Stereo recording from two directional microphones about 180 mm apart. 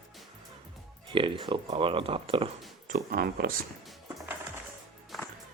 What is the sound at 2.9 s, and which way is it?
Speech, 55° right (ahead or behind).